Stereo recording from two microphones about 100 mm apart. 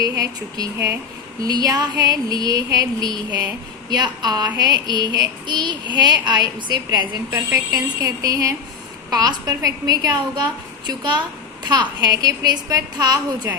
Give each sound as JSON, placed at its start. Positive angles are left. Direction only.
{"t": 0.0, "sound": "a woman's voice", "side_deg": -40}
{"t": 7.5, "sound": "a woman's voice", "side_deg": -35}